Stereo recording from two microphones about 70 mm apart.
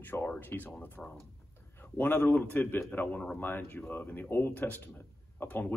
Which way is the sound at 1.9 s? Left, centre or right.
Left.